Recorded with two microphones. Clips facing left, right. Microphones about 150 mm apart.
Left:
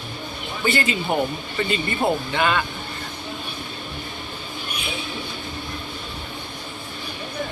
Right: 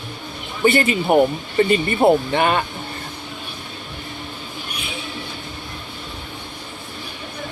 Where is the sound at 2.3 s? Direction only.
45° right (ahead or behind).